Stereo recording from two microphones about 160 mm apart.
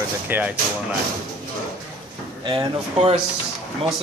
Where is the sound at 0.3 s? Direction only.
10° right (ahead or behind).